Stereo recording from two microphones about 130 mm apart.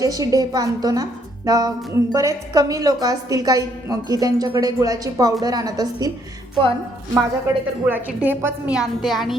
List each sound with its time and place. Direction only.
0.0 s a woman's voice: 25° right (ahead or behind)
7.1 s a woman's voice: 20° right (ahead or behind)
8.7 s a woman's voice: 5° right (ahead or behind)